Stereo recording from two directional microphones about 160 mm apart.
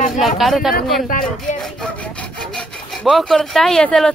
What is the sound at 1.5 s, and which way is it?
Sawing, 5° left (ahead or behind).